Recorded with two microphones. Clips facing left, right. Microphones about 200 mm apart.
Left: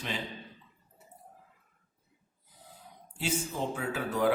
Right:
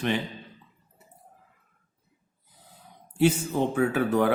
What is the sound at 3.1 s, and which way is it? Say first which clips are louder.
Speech: right 10 dB; 60° right (ahead or behind).